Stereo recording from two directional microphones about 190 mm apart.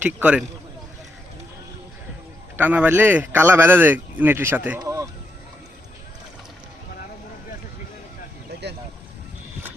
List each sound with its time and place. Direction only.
0.0 s speech: 5° right (ahead or behind)
2.6 s speech: 10° right (ahead or behind)
4.8 s a sound: 20° right (ahead or behind)